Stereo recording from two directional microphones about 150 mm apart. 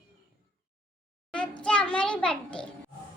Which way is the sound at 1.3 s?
5° left (ahead or behind).